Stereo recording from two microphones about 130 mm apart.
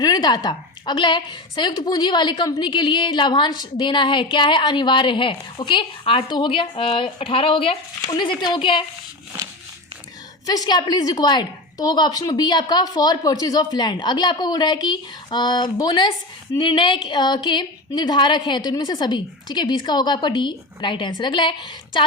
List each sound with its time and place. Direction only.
0.0 s a woman's voice: 30° left (ahead or behind)
10.4 s a woman's voice: 30° left (ahead or behind)